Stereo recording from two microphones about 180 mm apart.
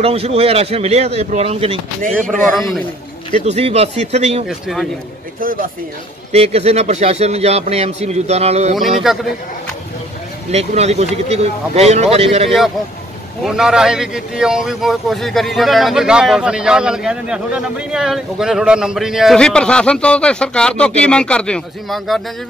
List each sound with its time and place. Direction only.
0.0 s speech: 35° right (ahead or behind)
3.3 s speech: 35° right (ahead or behind)
4.5 s speech: centre (ahead or behind)
5.4 s speech: 50° right (ahead or behind)
6.3 s speech: 35° right (ahead or behind)
9.1 s speech: 5° right (ahead or behind)
10.5 s speech: 35° right (ahead or behind)
13.4 s speech: 5° right (ahead or behind)